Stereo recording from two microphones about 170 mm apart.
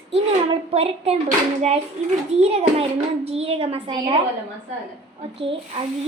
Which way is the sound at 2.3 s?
35° right (ahead or behind).